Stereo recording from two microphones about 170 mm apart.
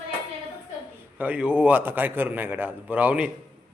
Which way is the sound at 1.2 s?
10° right (ahead or behind).